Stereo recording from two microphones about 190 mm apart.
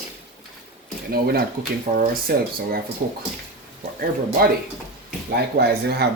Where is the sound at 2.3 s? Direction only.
50° right (ahead or behind).